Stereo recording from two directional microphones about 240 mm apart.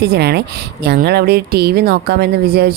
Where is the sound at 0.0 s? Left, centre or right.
Right.